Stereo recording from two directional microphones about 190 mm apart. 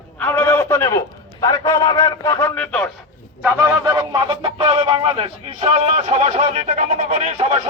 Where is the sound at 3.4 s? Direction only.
10° right (ahead or behind).